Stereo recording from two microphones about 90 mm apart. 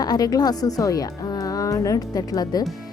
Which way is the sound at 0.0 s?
45° left (ahead or behind).